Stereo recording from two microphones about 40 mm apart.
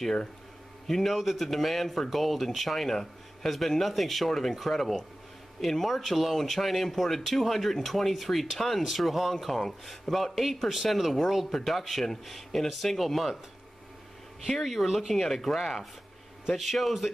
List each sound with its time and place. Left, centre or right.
0.8 s speech: centre
14.5 s speech: centre
15.1 s speech: centre